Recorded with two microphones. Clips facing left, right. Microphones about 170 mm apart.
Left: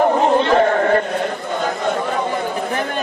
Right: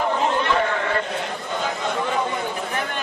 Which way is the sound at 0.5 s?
45° left (ahead or behind).